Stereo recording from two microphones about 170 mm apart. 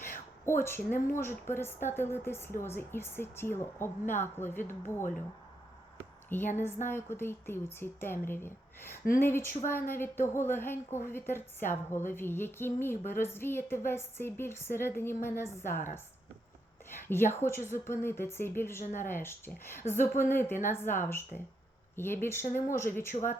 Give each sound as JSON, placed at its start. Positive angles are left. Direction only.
{"t": 0.4, "sound": "a woman's voice", "side_deg": 15}
{"t": 6.2, "sound": "a woman's voice", "side_deg": 10}
{"t": 16.9, "sound": "a woman's voice", "side_deg": 15}
{"t": 18.8, "sound": "a woman's voice", "side_deg": 45}
{"t": 19.0, "sound": "a woman's voice", "side_deg": 15}